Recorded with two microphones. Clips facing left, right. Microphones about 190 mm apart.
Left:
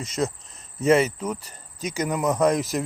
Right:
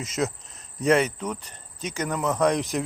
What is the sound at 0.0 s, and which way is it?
Speech, centre (ahead or behind).